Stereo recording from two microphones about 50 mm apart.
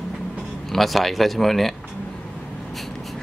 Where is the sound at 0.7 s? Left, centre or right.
Centre.